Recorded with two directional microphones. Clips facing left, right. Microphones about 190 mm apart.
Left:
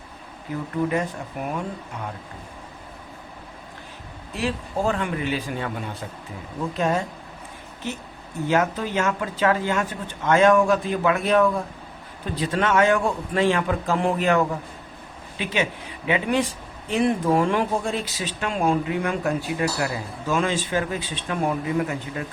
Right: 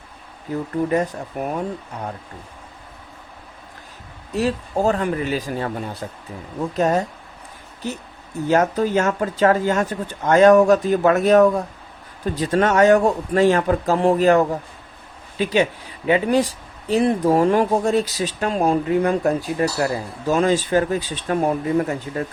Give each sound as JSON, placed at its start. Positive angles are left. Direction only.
{"t": 0.9, "sound": "speech", "side_deg": -40}
{"t": 4.4, "sound": "speech", "side_deg": -40}